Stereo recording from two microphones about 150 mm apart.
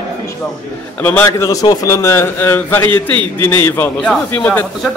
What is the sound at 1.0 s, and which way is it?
A man's voice, 15° left (ahead or behind).